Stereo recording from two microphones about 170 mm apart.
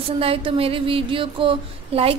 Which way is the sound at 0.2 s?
35° right (ahead or behind).